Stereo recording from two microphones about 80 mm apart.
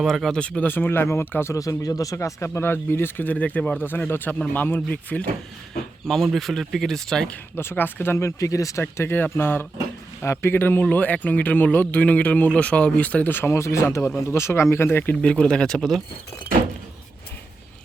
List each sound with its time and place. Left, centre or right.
0.0 s speech: centre
0.7 s speech: left
1.5 s speech: left
2.1 s speech: left; by 5.2 s centre
6.1 s speech: centre
7.5 s speech: left
8.4 s speech: left
8.8 s speech: left
15.1 s speech: centre